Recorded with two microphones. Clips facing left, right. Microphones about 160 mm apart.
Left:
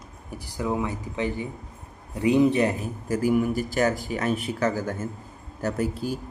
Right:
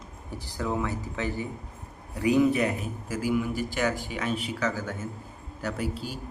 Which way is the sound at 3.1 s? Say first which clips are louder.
Left 5 dB; 45° left (ahead or behind).